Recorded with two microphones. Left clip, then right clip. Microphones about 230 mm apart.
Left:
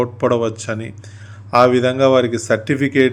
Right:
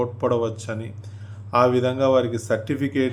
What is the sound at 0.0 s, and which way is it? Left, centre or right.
A man's voice, centre.